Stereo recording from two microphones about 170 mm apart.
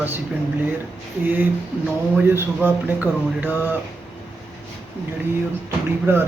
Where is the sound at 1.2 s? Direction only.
10° right (ahead or behind).